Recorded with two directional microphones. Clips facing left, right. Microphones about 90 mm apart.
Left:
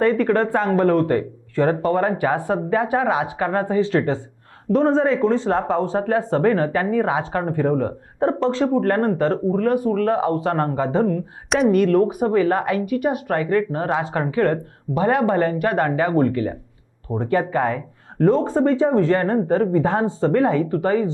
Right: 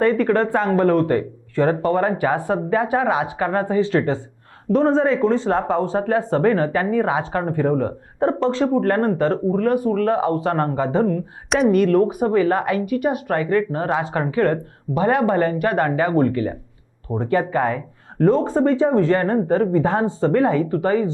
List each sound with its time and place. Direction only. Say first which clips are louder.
0.0 s speech: even; 20° right (ahead or behind)
11.4 s speech: even; centre (ahead or behind)
11.7 s speech: even; 15° right (ahead or behind)